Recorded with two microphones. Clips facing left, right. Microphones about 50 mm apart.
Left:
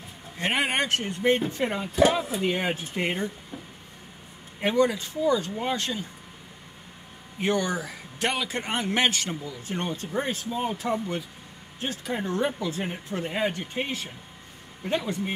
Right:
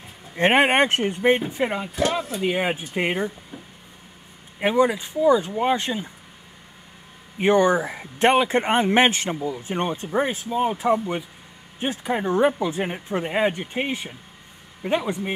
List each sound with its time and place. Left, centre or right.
0.4 s speech: right
3.5 s a sound: centre
4.6 s speech: centre
7.3 s speech: right